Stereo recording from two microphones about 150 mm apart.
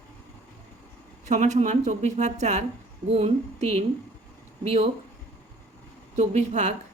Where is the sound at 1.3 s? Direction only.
50° right (ahead or behind).